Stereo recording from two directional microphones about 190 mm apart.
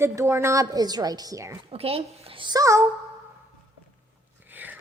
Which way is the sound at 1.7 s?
30° right (ahead or behind).